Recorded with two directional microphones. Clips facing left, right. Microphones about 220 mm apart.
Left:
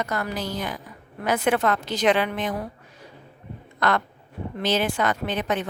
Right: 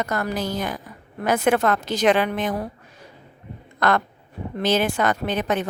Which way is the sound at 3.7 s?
45° right (ahead or behind).